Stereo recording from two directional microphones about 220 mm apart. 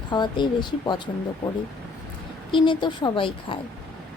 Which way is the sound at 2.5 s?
20° left (ahead or behind).